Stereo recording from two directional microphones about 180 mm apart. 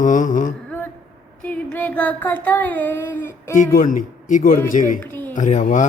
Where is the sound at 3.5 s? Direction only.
45° left (ahead or behind).